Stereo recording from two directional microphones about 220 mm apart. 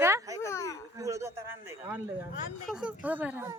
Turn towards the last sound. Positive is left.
turn(degrees=-5)  # may be behind; listen again after turning